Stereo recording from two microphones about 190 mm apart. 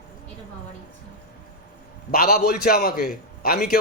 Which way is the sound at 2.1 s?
55° left (ahead or behind).